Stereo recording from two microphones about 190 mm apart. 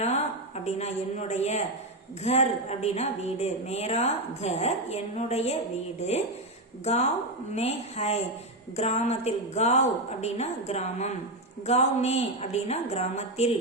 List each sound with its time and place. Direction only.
0.0 s a woman's voice: 35° left (ahead or behind)